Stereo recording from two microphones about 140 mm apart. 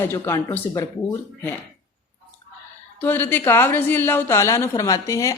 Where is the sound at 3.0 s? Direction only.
15° left (ahead or behind).